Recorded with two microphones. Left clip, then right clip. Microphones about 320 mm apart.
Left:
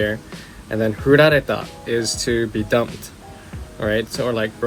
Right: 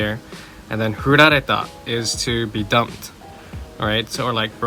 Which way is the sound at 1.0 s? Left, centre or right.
Centre.